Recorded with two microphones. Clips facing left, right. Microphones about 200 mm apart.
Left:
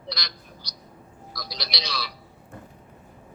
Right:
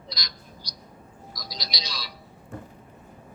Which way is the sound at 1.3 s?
65° left (ahead or behind).